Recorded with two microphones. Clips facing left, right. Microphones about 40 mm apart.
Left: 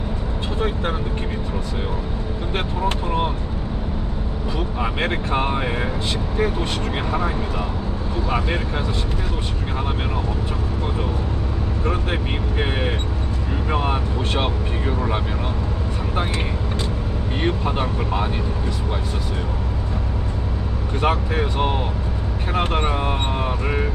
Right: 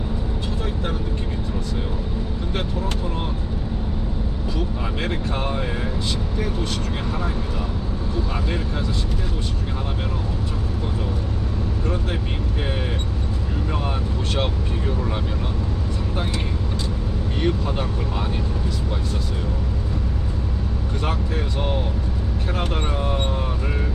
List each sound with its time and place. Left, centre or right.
4.5 s speech: left
8.3 s speech: left
13.7 s speech: left
17.4 s speech: left
21.0 s speech: left